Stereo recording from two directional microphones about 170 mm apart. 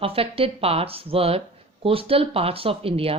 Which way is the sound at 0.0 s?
35° right (ahead or behind).